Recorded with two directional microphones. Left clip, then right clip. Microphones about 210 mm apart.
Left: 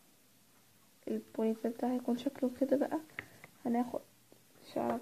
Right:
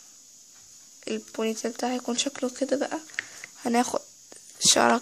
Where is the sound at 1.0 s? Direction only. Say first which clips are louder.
Right 6 dB; 20° right (ahead or behind).